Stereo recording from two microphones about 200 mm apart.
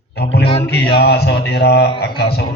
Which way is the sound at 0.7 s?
55° left (ahead or behind).